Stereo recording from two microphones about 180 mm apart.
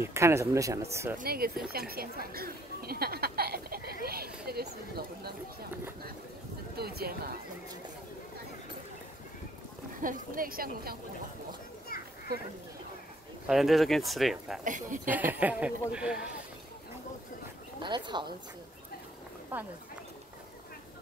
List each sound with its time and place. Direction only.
0.0 s speech: 15° right (ahead or behind)
1.1 s a woman's voice: 55° right (ahead or behind)
4.0 s a sound: 60° right (ahead or behind)
6.8 s speech: 60° right (ahead or behind)
9.9 s a woman's voice: 50° right (ahead or behind)
11.9 s children playing: 55° left (ahead or behind)
13.5 s speech: centre (ahead or behind)
14.6 s a woman's voice: 45° right (ahead or behind)
15.0 s speech: 10° right (ahead or behind)
17.7 s speech: 25° right (ahead or behind)
19.5 s speech: 10° right (ahead or behind)